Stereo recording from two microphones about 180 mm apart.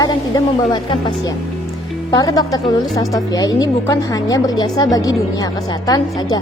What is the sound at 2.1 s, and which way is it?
A woman's voice, 20° left (ahead or behind).